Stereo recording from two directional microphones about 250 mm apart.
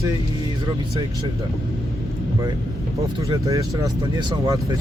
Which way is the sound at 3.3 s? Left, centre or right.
Centre.